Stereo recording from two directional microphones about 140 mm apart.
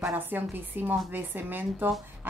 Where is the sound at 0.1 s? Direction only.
15° right (ahead or behind).